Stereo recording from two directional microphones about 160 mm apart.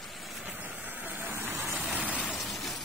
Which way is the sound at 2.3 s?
Centre (ahead or behind).